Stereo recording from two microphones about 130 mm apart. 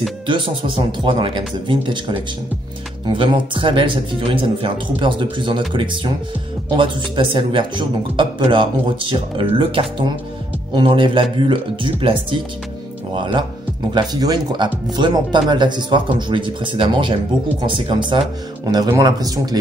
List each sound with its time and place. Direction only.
0.3 s speech: 40° right (ahead or behind)